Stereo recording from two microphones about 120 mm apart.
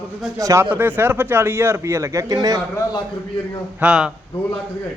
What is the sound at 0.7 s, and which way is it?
A man's voice, 15° right (ahead or behind).